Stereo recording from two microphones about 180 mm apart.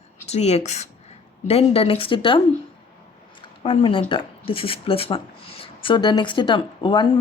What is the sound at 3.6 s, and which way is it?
Speech, 30° left (ahead or behind).